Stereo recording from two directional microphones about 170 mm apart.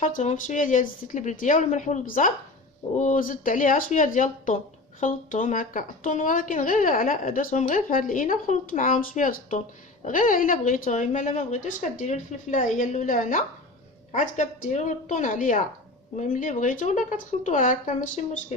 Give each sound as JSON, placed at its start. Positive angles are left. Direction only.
{"t": 0.0, "sound": "speech", "side_deg": 45}